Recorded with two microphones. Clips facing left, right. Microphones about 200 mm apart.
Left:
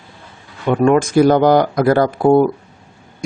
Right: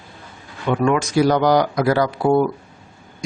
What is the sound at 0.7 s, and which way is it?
Speech, 45° left (ahead or behind).